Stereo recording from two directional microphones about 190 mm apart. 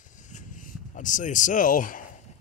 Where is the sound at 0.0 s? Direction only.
40° left (ahead or behind).